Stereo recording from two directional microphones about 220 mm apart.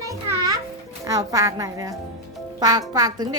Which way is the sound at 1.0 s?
15° right (ahead or behind).